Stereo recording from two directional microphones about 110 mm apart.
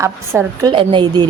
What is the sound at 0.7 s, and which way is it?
Speech, 45° right (ahead or behind).